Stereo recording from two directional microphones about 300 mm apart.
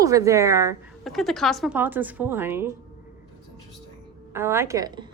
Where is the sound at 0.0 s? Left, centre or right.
Centre.